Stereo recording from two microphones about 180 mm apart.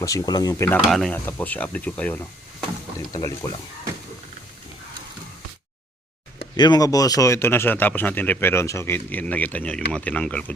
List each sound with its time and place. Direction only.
0.0 s speech: 20° left (ahead or behind)
0.7 s speech: centre (ahead or behind)
3.1 s speech: 20° left (ahead or behind)
6.4 s speech: 25° left (ahead or behind); by 10.4 s 5° left (ahead or behind)